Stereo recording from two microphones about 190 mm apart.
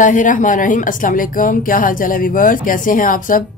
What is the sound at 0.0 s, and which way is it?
Speech, 40° left (ahead or behind).